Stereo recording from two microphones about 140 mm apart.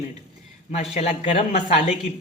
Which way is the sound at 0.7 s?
55° left (ahead or behind).